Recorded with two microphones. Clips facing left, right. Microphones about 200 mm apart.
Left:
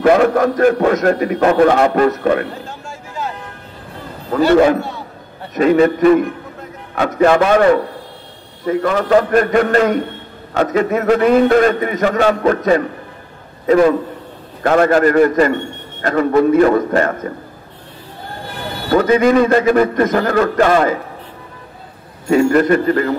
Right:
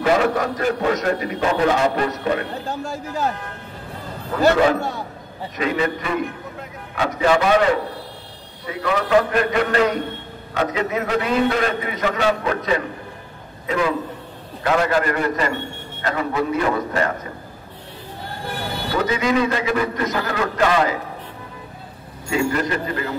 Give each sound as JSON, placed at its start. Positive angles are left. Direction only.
{"t": 0.0, "sound": "a man's voice", "side_deg": 50}
{"t": 2.7, "sound": "a sound", "side_deg": -40}
{"t": 5.5, "sound": "a man's voice", "side_deg": 45}
{"t": 18.9, "sound": "a man's voice", "side_deg": 50}
{"t": 22.3, "sound": "a man's voice", "side_deg": 50}